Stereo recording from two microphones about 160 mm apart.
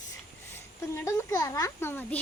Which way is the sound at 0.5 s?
15° left (ahead or behind).